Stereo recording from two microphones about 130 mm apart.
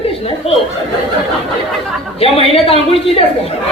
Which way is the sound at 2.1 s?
45° left (ahead or behind).